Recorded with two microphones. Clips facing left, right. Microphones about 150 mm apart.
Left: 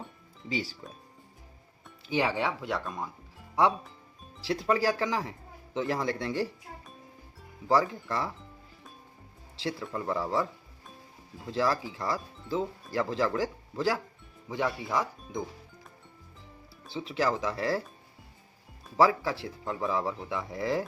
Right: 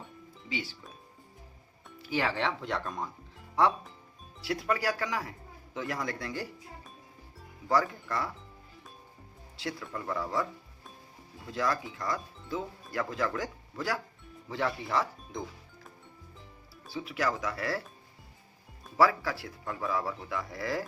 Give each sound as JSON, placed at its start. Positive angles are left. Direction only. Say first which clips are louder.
{"t": 0.4, "sound": "speech", "louder": "left 4 dB", "side_deg": 35}
{"t": 2.0, "sound": "speech", "louder": "left 2 dB", "side_deg": 20}
{"t": 4.4, "sound": "speech", "louder": "left 4 dB", "side_deg": 30}
{"t": 7.7, "sound": "speech", "louder": "left 2 dB", "side_deg": 25}
{"t": 9.6, "sound": "speech", "louder": "left 4 dB", "side_deg": 25}
{"t": 11.5, "sound": "speech", "louder": "left 3 dB", "side_deg": 30}
{"t": 14.4, "sound": "speech", "louder": "left 1 dB", "side_deg": 15}
{"t": 16.9, "sound": "speech", "louder": "left 3 dB", "side_deg": 30}
{"t": 18.9, "sound": "speech", "louder": "left 2 dB", "side_deg": 25}